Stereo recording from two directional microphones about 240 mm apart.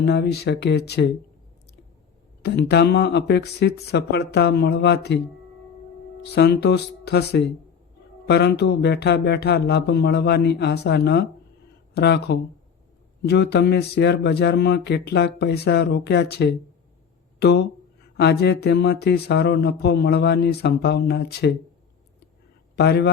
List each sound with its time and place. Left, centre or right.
0.0 s speech: left
2.4 s speech: left
6.2 s speech: left
22.7 s a man's voice: left